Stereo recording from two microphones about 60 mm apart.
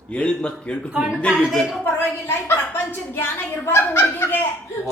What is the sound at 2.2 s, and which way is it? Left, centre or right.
Speech, left.